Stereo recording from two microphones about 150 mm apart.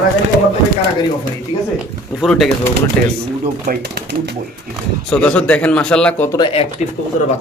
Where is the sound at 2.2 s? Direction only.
Centre (ahead or behind).